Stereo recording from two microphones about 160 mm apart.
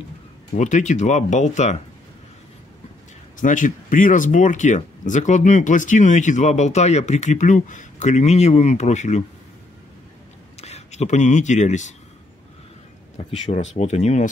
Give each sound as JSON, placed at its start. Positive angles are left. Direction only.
{"t": 0.6, "sound": "speech", "side_deg": 50}
{"t": 3.3, "sound": "speech", "side_deg": 55}
{"t": 10.6, "sound": "speech", "side_deg": 45}
{"t": 13.2, "sound": "speech", "side_deg": 40}